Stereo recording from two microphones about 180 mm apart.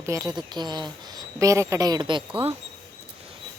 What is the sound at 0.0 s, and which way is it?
A woman's voice, 15° right (ahead or behind).